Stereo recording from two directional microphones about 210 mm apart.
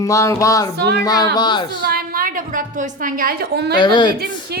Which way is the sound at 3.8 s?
20° left (ahead or behind).